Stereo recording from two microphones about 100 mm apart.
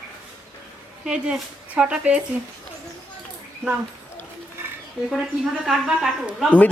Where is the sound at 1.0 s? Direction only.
10° right (ahead or behind).